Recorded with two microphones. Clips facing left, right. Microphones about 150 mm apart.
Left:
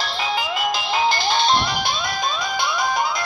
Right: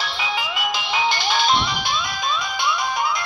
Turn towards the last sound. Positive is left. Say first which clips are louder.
# left 2 dB
turn(degrees=40)  # may be behind; listen again after turning